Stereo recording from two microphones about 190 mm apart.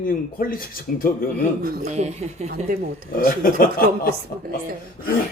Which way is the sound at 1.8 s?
35° right (ahead or behind).